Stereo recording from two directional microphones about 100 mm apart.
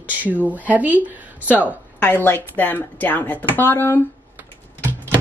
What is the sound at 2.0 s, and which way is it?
Speech, 20° left (ahead or behind).